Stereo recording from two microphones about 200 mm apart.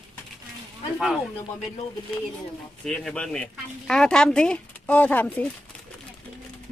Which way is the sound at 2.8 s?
Centre (ahead or behind).